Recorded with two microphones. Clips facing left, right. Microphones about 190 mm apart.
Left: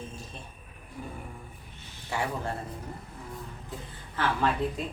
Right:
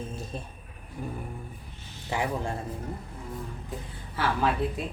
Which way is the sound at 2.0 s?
15° right (ahead or behind).